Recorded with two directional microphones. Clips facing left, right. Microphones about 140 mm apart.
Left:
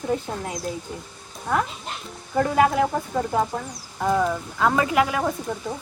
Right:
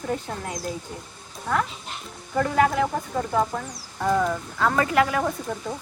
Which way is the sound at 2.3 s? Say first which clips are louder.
Left 2 dB; 15° left (ahead or behind).